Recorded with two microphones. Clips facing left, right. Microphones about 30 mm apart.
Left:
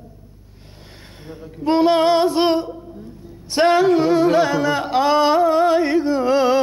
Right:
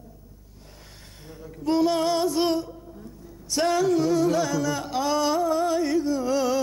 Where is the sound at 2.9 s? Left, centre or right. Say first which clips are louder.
Left 5 dB; left.